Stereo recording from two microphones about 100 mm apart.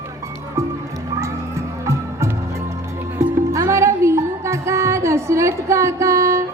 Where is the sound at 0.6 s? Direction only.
30° right (ahead or behind).